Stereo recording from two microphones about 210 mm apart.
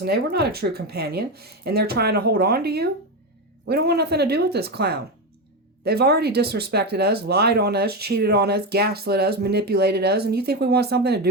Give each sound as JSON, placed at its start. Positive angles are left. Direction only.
{"t": 0.0, "sound": "speech", "side_deg": -50}